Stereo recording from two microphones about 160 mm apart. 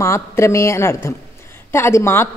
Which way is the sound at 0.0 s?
20° left (ahead or behind).